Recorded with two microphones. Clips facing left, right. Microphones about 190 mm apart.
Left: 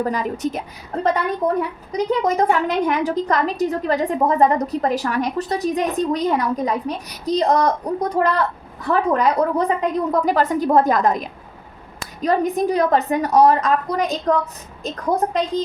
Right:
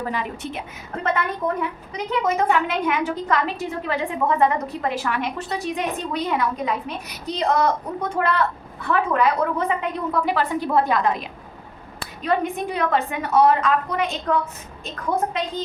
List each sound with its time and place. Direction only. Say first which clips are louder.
0.0 s a woman's voice: left 6 dB; 40° left (ahead or behind)
1.9 s a woman's voice: left 4 dB; 40° left (ahead or behind)